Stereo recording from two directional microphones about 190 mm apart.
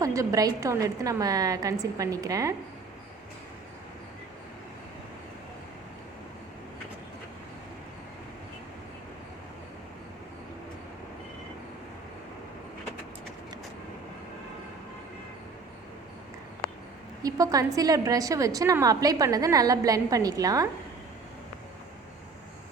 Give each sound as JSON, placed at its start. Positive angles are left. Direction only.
{"t": 0.0, "sound": "a woman's voice", "side_deg": -15}
{"t": 17.2, "sound": "a woman's voice", "side_deg": -20}